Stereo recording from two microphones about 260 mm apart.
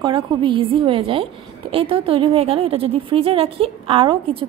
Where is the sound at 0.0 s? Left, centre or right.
Centre.